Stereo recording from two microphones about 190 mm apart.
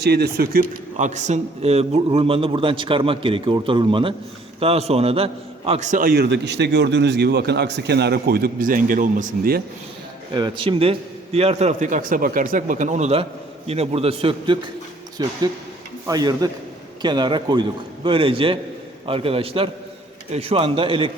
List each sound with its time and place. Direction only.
0.0 s speech: 55° right (ahead or behind)
0.9 s a man's voice: 40° right (ahead or behind)
10.3 s a man's voice: 25° right (ahead or behind)